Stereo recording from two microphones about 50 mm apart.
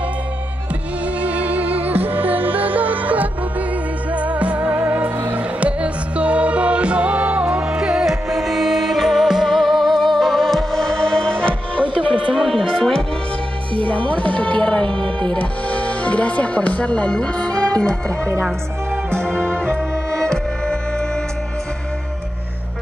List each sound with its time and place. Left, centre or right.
1.2 s music: right; by 11.8 s centre
12.4 s music: centre
13.8 s speech: left
20.1 s music: centre